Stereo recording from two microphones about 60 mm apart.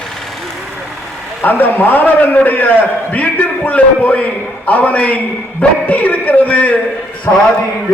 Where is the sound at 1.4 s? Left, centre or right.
Left.